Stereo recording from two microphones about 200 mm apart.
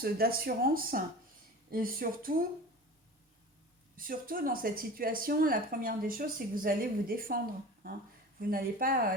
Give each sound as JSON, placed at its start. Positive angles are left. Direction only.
{"t": 0.0, "sound": "a woman's voice", "side_deg": -50}
{"t": 3.9, "sound": "a woman's voice", "side_deg": -45}